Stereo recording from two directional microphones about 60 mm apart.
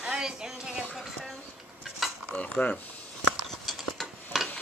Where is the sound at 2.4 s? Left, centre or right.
Left.